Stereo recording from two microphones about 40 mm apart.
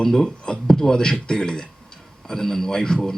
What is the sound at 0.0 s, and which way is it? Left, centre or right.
Speech, centre.